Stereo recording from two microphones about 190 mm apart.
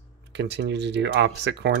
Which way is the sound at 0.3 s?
65° right (ahead or behind).